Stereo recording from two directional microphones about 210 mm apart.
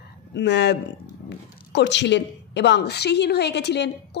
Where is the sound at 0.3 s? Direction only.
55° left (ahead or behind).